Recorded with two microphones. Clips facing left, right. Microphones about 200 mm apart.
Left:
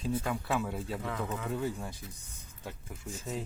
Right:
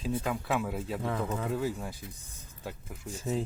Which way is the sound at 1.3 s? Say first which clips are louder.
Right 3 dB; 5° right (ahead or behind).